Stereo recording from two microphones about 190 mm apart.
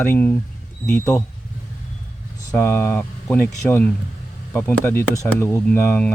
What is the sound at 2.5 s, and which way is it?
Speech, 10° left (ahead or behind).